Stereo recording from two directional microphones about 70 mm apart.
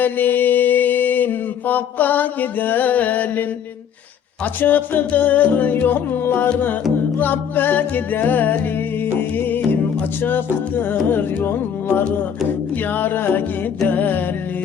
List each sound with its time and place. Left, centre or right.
0.0 s mantra: left
4.6 s mantra: left
9.1 s music: left
11.1 s mantra: left
12.9 s mantra: left